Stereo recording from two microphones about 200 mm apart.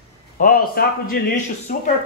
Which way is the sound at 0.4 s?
45° left (ahead or behind).